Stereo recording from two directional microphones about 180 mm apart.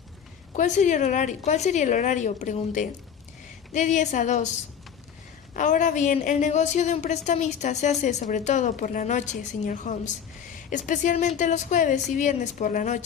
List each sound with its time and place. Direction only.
0.5 s a woman's voice: 45° left (ahead or behind)
5.5 s a woman's voice: 45° left (ahead or behind)